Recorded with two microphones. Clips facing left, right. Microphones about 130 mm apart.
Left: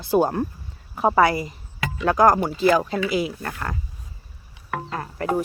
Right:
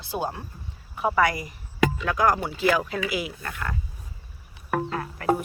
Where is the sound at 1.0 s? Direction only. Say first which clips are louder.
Left 5 dB; 35° left (ahead or behind).